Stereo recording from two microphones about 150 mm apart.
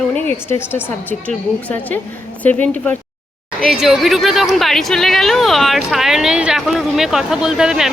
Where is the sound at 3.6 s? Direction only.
5° right (ahead or behind).